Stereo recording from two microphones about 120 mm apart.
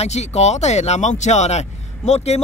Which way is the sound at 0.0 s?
65° left (ahead or behind).